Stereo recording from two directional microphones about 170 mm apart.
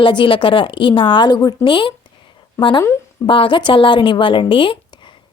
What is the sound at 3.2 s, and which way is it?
A woman's voice, 30° left (ahead or behind).